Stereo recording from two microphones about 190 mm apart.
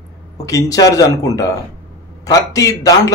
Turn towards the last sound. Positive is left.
turn(degrees=15)  # may be behind; listen again after turning